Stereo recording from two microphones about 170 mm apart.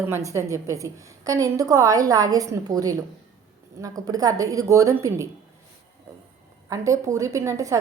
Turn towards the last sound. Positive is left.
turn(degrees=-20)  # may be behind; listen again after turning